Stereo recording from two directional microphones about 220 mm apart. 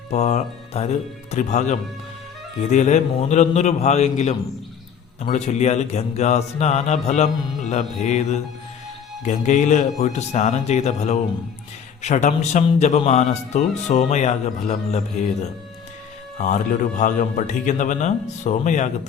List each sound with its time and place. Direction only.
0.1 s speech: 30° left (ahead or behind)